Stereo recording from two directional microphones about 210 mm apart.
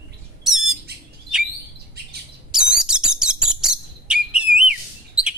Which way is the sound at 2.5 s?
5° right (ahead or behind).